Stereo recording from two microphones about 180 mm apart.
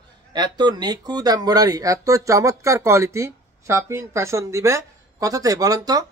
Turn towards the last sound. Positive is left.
turn(degrees=-20)  # may be behind; listen again after turning